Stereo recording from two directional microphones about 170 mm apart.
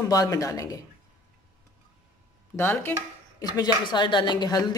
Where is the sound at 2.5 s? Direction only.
15° left (ahead or behind).